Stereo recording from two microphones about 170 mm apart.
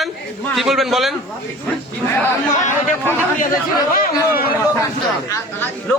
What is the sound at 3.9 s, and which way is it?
Speech, 60° left (ahead or behind).